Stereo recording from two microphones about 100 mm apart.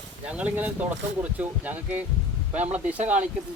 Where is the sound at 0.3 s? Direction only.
15° right (ahead or behind).